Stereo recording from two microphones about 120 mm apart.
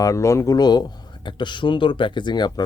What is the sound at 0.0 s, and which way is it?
Speech, 25° left (ahead or behind).